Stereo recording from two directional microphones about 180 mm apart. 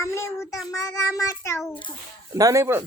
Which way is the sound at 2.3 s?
20° right (ahead or behind).